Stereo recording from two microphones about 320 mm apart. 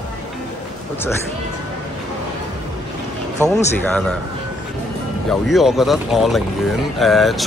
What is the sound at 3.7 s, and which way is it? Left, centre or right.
Speech, centre.